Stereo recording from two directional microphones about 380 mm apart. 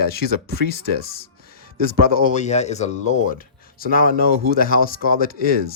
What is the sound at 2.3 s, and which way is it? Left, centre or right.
Speech, centre.